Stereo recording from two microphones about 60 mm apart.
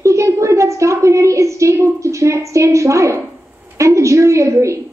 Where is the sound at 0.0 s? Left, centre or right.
Right.